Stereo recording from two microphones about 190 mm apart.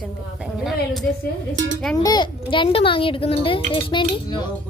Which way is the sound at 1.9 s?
20° left (ahead or behind).